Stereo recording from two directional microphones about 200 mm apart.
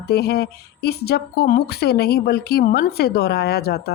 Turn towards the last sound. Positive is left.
turn(degrees=50)  # may be behind; listen again after turning